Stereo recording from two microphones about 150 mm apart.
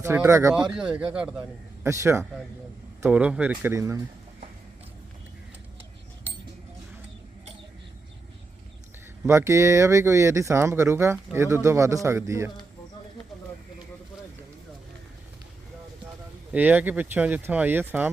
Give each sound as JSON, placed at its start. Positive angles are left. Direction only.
{"t": 0.0, "sound": "speech", "side_deg": -15}
{"t": 0.5, "sound": "a man's voice", "side_deg": -5}
{"t": 1.8, "sound": "speech", "side_deg": -20}
{"t": 9.2, "sound": "speech", "side_deg": -20}
{"t": 16.5, "sound": "speech", "side_deg": -10}